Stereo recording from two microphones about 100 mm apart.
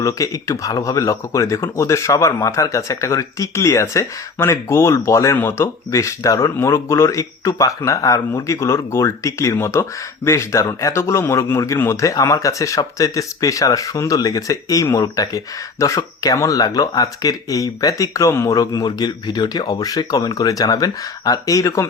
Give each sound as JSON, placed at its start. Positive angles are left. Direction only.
{"t": 0.0, "sound": "a man's voice", "side_deg": 30}